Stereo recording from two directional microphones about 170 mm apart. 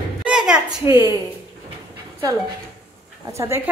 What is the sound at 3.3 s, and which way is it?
Speech, 15° right (ahead or behind).